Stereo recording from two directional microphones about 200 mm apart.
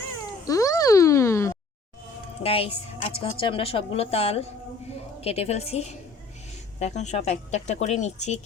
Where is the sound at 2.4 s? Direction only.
30° left (ahead or behind).